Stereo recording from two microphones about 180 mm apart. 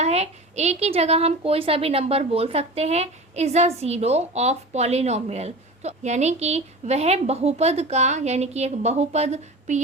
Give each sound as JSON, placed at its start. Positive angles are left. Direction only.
{"t": 0.0, "sound": "a woman's voice", "side_deg": -35}